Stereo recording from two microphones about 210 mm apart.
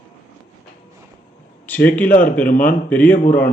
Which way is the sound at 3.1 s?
40° left (ahead or behind).